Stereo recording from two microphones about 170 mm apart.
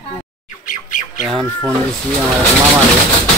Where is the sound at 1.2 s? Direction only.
5° right (ahead or behind).